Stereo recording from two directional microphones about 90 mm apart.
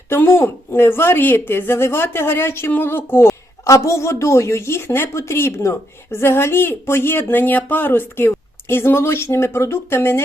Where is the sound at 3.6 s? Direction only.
35° left (ahead or behind).